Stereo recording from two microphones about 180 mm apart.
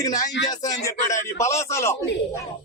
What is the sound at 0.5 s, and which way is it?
Speech, 20° left (ahead or behind).